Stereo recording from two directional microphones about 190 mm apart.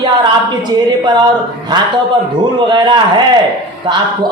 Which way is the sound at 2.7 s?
25° right (ahead or behind).